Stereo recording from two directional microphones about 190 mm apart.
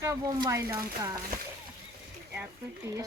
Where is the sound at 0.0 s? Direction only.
20° right (ahead or behind).